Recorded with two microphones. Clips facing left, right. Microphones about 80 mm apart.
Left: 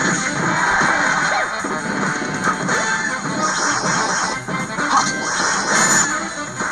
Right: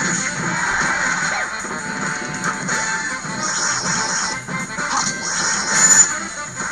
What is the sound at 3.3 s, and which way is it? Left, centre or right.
Music, left.